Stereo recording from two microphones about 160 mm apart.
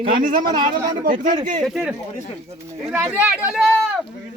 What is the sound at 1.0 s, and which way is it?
Speech, 60° right (ahead or behind).